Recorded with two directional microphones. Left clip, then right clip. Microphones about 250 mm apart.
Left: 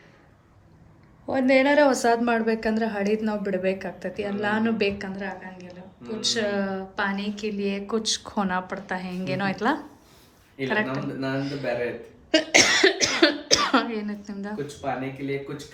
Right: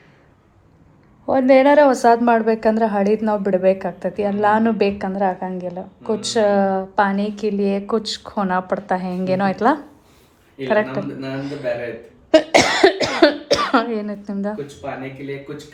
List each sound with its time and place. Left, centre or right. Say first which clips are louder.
1.7 s a woman's voice: right 7 dB; centre
12.4 s cough: right 3 dB; centre